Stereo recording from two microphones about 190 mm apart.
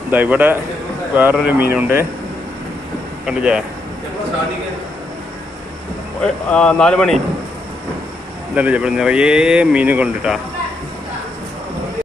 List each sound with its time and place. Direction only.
0.1 s speech: 10° right (ahead or behind)
3.2 s speech: 5° right (ahead or behind)
6.2 s speech: 5° left (ahead or behind)
8.5 s speech: 5° right (ahead or behind)